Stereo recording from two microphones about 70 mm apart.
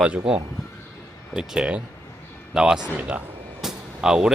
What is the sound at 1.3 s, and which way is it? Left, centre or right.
Speech, centre.